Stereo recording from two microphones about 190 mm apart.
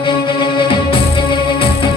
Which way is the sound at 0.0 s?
25° left (ahead or behind).